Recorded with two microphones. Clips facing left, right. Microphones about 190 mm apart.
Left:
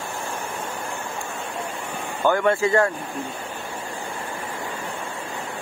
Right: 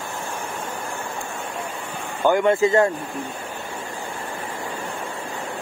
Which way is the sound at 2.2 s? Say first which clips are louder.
Right 2 dB; 15° right (ahead or behind).